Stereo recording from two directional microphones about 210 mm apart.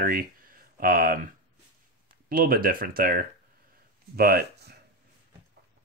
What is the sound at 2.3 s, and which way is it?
Speech, 45° right (ahead or behind).